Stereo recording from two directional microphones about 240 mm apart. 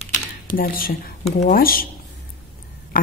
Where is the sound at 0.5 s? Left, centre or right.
Left.